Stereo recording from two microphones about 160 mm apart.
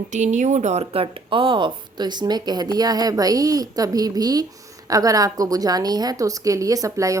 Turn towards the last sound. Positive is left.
turn(degrees=-20)  # may be behind; listen again after turning